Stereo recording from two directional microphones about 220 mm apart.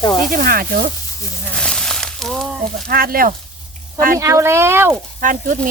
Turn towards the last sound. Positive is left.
turn(degrees=-35)  # may be behind; listen again after turning